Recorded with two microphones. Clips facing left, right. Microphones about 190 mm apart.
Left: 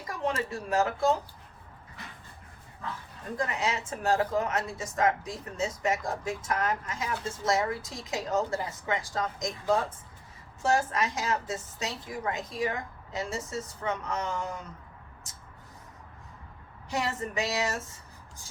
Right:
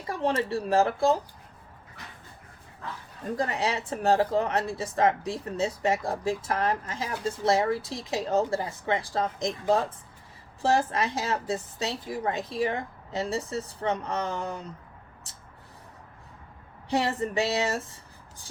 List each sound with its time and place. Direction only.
0.1 s a woman's voice: 35° right (ahead or behind)
3.3 s a woman's voice: 35° right (ahead or behind)
16.9 s a woman's voice: 35° right (ahead or behind)